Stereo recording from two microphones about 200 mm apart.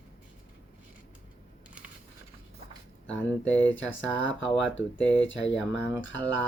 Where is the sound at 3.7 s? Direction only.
70° left (ahead or behind).